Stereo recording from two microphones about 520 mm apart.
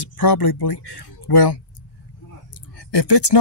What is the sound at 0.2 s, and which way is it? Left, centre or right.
Speech, left.